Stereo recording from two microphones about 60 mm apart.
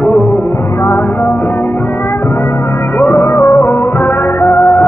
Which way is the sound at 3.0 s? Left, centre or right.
Left.